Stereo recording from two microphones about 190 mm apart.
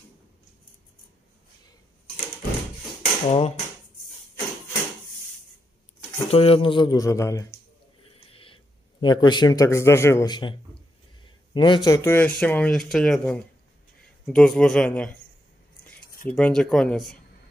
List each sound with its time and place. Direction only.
3.3 s speech: 30° left (ahead or behind)
6.1 s a man's voice: 30° left (ahead or behind); by 7.4 s 15° left (ahead or behind)
8.3 s a sound: 30° left (ahead or behind)
9.0 s a man's voice: 25° left (ahead or behind)
11.5 s speech: 25° left (ahead or behind); by 15.1 s 5° left (ahead or behind)
16.3 s speech: 5° left (ahead or behind)